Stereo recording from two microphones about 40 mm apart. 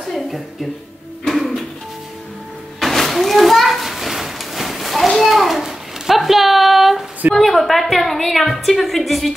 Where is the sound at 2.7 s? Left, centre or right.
Centre.